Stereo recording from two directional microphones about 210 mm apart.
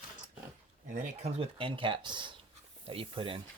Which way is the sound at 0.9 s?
35° right (ahead or behind).